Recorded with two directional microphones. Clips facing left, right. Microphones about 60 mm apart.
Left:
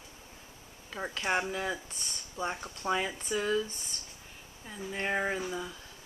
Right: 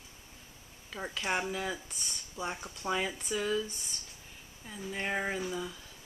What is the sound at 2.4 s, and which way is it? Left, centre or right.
Speech, centre.